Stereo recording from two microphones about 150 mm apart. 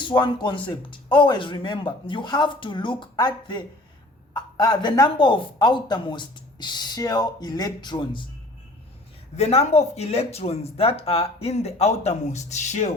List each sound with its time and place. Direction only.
0.0 s speech: 30° left (ahead or behind)
9.3 s speech: 45° left (ahead or behind)